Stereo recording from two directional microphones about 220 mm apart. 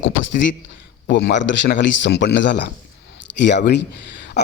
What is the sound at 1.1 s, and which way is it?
A man's voice, 55° left (ahead or behind).